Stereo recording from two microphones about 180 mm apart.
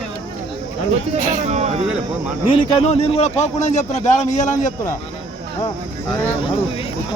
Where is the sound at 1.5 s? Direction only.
35° right (ahead or behind).